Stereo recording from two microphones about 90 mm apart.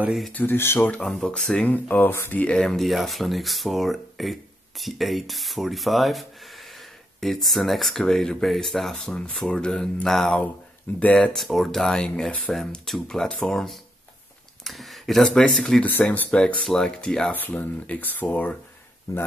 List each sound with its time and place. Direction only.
0.3 s speech: 20° left (ahead or behind)
0.9 s speech: 10° left (ahead or behind)
1.7 s speech: 20° left (ahead or behind)
2.4 s speech: 5° left (ahead or behind)
15.8 s speech: 20° left (ahead or behind)